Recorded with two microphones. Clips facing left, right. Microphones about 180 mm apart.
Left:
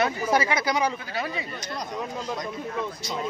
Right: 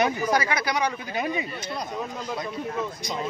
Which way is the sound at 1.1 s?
20° right (ahead or behind).